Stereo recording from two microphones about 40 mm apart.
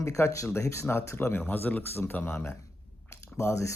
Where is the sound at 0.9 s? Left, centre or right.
Left.